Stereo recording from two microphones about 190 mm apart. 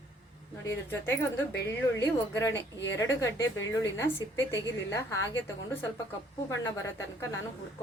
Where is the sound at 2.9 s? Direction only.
15° left (ahead or behind).